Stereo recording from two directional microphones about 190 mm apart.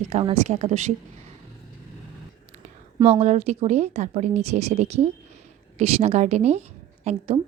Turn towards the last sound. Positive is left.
turn(degrees=-35)  # may be behind; listen again after turning